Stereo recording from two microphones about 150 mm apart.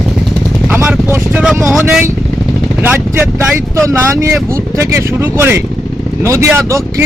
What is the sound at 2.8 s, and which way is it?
Speech, 15° right (ahead or behind).